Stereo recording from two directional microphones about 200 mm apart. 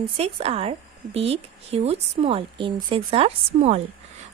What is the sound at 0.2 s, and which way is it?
Speech, 30° right (ahead or behind).